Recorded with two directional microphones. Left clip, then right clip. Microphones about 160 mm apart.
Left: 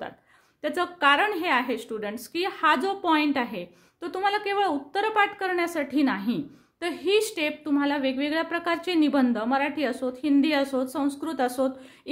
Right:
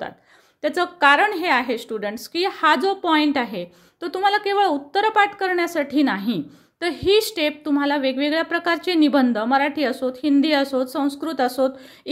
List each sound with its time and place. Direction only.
0.6 s a woman's voice: 25° right (ahead or behind)